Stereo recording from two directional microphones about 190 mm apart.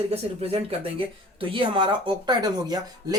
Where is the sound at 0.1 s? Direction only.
30° right (ahead or behind).